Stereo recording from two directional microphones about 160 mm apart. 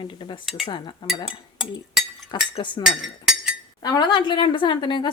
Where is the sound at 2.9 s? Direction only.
5° right (ahead or behind).